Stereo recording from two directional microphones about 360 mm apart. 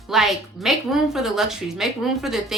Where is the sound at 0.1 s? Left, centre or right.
Centre.